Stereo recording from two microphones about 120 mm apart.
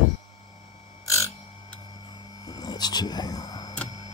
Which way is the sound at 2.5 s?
35° left (ahead or behind).